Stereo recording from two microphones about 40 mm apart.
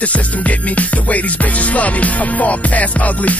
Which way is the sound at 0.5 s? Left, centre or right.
Left.